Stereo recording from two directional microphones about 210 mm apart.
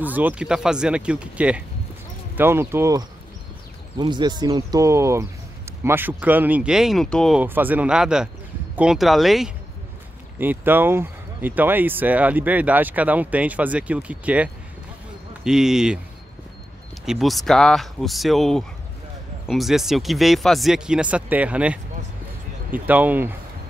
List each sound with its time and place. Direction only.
0.0 s speech: 10° right (ahead or behind)
7.4 s speech: 10° right (ahead or behind)
17.0 s speech: centre (ahead or behind)